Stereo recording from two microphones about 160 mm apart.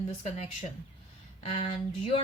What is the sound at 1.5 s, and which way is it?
Speech, 40° left (ahead or behind).